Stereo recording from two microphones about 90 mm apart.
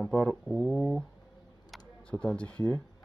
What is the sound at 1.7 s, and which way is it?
Camera, 10° left (ahead or behind).